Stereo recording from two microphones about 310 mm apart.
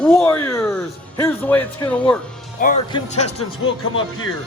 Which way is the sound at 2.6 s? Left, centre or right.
Left.